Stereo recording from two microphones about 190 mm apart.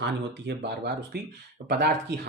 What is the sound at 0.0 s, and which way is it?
Speech, 60° right (ahead or behind).